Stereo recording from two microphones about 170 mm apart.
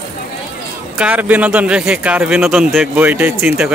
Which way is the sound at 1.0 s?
10° right (ahead or behind).